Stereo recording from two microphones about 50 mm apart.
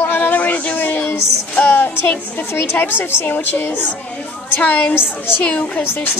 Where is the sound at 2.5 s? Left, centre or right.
Left.